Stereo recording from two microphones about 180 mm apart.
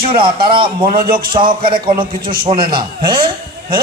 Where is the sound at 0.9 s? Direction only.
55° right (ahead or behind).